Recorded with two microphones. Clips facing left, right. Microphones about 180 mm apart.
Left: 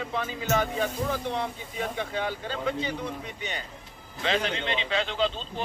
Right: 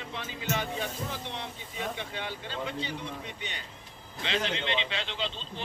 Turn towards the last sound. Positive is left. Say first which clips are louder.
# left 8 dB
turn(degrees=45)  # may be behind; listen again after turning